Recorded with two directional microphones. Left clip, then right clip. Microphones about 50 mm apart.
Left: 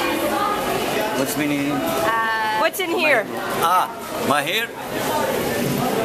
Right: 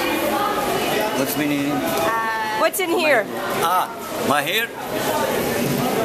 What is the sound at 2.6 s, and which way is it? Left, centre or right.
Speech, right.